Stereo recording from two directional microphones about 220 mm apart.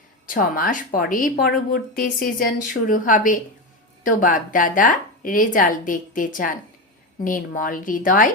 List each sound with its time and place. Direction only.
0.3 s speech: 40° left (ahead or behind)